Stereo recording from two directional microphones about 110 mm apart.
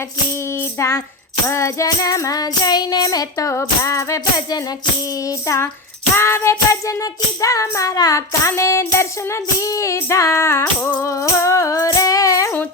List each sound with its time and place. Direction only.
0.5 s music: 25° left (ahead or behind)